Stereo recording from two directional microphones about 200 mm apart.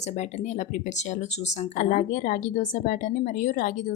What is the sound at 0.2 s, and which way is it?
A woman's voice, 35° left (ahead or behind).